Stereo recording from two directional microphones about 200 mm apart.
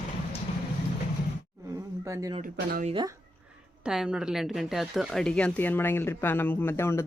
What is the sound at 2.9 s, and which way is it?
Speech, 20° right (ahead or behind).